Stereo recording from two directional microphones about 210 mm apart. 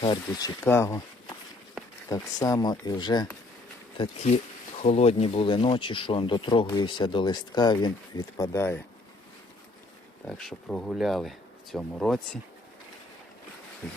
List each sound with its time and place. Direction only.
0.0 s speech: 20° left (ahead or behind)
10.2 s speech: 5° left (ahead or behind)